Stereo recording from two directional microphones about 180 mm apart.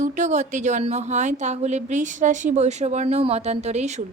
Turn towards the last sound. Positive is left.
turn(degrees=-40)  # may be behind; listen again after turning